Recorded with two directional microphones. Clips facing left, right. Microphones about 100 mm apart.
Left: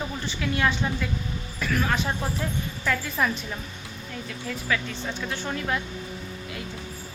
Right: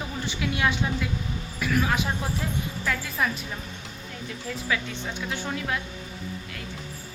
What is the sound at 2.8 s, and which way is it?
Speech, centre (ahead or behind).